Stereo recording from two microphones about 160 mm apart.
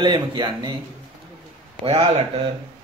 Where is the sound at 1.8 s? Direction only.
35° right (ahead or behind).